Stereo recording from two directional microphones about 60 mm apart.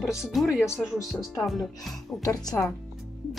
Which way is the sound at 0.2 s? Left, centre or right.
Centre.